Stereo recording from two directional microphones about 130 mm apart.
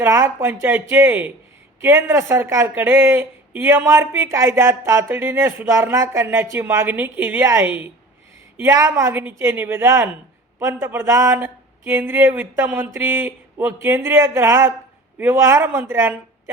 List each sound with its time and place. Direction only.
0.0 s a woman's voice: 20° right (ahead or behind)